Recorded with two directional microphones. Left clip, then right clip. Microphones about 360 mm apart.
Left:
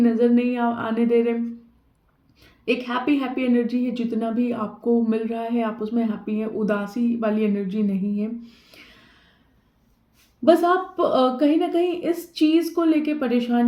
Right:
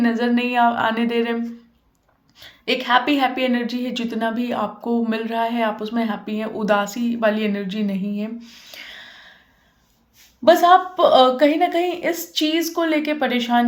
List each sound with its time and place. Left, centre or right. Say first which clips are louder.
0.0 s a woman's voice: left 1 dB; centre
2.8 s a woman's voice: right 7 dB; centre
8.7 s a sound: right 13 dB; centre
10.4 s a woman's voice: right 5 dB; centre